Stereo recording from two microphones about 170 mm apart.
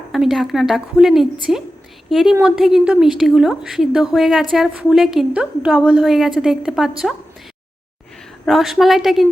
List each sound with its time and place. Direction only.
0.1 s a woman's voice: centre (ahead or behind)
8.4 s a woman's voice: centre (ahead or behind)